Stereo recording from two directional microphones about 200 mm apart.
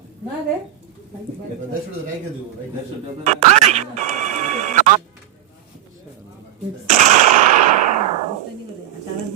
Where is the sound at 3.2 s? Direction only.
35° right (ahead or behind).